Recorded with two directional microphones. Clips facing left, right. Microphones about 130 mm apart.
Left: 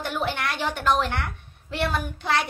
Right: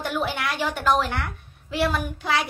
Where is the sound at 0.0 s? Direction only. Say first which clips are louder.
Right 1 dB; 5° right (ahead or behind).